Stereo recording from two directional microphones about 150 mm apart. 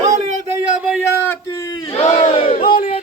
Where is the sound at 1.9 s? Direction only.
45° left (ahead or behind).